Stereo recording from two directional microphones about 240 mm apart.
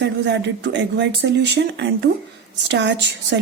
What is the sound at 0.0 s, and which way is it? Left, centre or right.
Speech, right.